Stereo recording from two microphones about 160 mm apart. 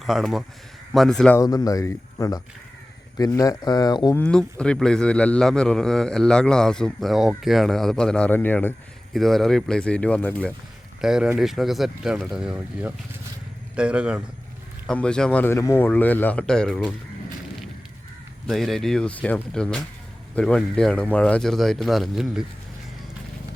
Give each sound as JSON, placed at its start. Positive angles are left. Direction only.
{"t": 0.0, "sound": "a man's voice", "side_deg": 0}
{"t": 1.4, "sound": "speech", "side_deg": 20}
{"t": 4.2, "sound": "a man's voice", "side_deg": 5}
{"t": 9.1, "sound": "a man's voice", "side_deg": 0}
{"t": 11.0, "sound": "a man's voice", "side_deg": -5}
{"t": 14.8, "sound": "speech", "side_deg": 5}
{"t": 18.4, "sound": "a man's voice", "side_deg": 0}